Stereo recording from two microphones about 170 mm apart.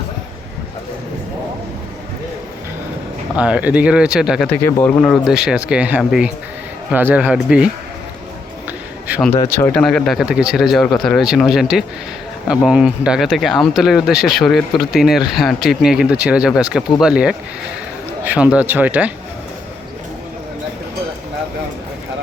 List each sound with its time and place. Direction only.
3.3 s speech: 5° right (ahead or behind)
4.5 s speech: 15° left (ahead or behind); by 7.7 s 5° right (ahead or behind)
8.6 s a sound: 10° right (ahead or behind)
9.5 s speech: 10° left (ahead or behind); by 19.1 s 10° right (ahead or behind)